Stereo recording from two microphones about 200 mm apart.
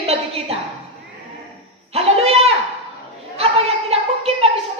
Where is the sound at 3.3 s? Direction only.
30° right (ahead or behind).